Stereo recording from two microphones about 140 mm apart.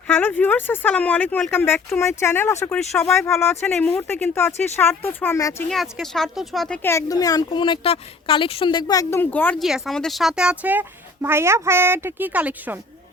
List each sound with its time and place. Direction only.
0.1 s speech: 15° left (ahead or behind)
2.6 s speech: 5° left (ahead or behind)
3.2 s speech: 20° left (ahead or behind)
5.6 s speech: centre (ahead or behind)
6.8 s speech: 25° left (ahead or behind)
9.6 s speech: centre (ahead or behind)